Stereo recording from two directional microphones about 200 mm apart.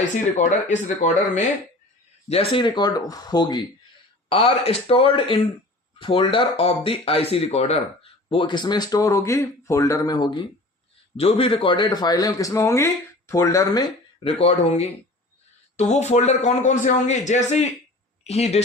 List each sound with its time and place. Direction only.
0.3 s speech: 35° left (ahead or behind)
2.3 s a man's voice: 30° left (ahead or behind)
14.3 s speech: 30° left (ahead or behind)